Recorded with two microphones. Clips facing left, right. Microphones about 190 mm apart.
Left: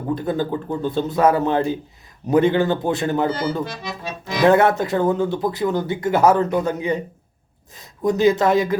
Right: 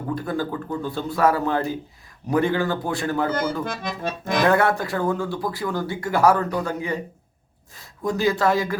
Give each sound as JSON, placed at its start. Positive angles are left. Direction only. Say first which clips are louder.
{"t": 0.1, "sound": "speech", "louder": "left 4 dB", "side_deg": 20}
{"t": 3.6, "sound": "speech", "louder": "even", "side_deg": -55}
{"t": 4.4, "sound": "speech", "louder": "left 6 dB", "side_deg": 20}